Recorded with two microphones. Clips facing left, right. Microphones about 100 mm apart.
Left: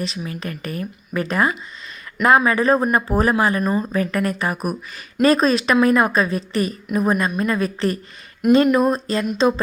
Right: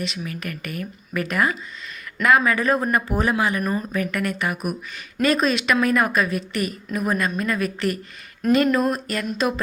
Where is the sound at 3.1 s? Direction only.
40° left (ahead or behind).